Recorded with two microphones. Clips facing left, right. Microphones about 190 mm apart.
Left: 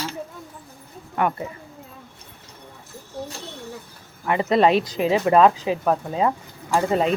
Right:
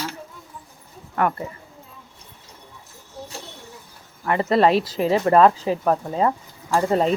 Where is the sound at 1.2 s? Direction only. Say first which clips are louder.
Right 1 dB; 20° left (ahead or behind).